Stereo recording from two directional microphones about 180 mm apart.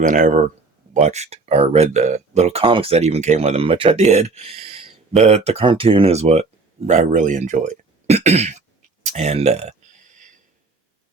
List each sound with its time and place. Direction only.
0.0 s speech: 45° right (ahead or behind)